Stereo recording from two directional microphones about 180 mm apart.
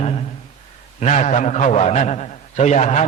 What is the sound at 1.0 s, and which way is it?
A man's voice, 40° left (ahead or behind).